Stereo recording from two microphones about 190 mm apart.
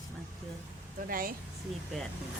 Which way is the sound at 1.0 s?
50° right (ahead or behind).